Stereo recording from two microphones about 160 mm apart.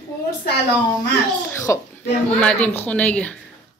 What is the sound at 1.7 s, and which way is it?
A woman's voice, 15° left (ahead or behind).